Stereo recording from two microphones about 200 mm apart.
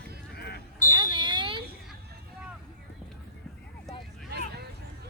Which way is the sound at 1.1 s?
25° right (ahead or behind).